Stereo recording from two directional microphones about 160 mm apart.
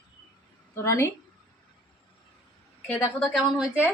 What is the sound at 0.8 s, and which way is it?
Speech, 15° left (ahead or behind).